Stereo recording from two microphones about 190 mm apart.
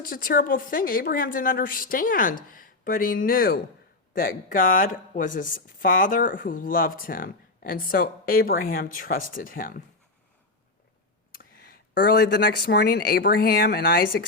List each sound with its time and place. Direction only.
0.0 s speech: 50° left (ahead or behind)
11.9 s speech: 60° left (ahead or behind)